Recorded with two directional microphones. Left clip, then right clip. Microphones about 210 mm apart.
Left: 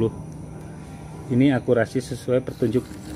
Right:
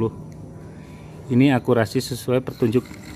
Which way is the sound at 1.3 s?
20° right (ahead or behind).